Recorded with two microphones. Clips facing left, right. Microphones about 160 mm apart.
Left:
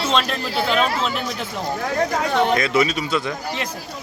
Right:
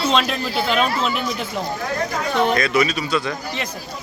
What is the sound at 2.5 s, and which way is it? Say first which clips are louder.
Speech: even; 25° left (ahead or behind).